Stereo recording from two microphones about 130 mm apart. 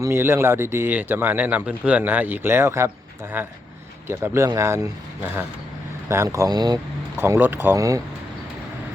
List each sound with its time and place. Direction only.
0.0 s speech: 20° right (ahead or behind)
7.2 s speech: 15° right (ahead or behind)